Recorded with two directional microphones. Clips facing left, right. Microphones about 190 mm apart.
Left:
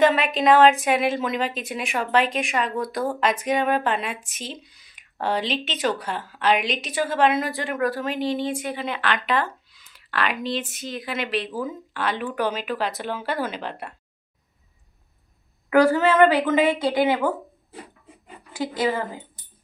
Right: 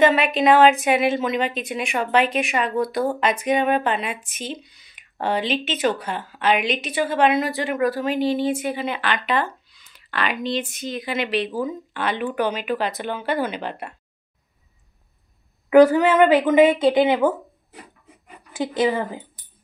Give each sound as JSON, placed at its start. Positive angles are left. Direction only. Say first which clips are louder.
{"t": 0.0, "sound": "a woman's voice", "louder": "right 2 dB", "side_deg": 0}
{"t": 15.7, "sound": "speech", "louder": "right 4 dB", "side_deg": -20}
{"t": 18.5, "sound": "speech", "louder": "right 3 dB", "side_deg": -20}